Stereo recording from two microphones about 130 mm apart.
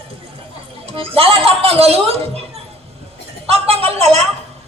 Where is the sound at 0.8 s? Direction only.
50° right (ahead or behind).